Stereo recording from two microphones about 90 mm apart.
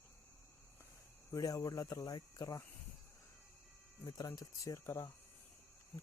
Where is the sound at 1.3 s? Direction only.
40° left (ahead or behind).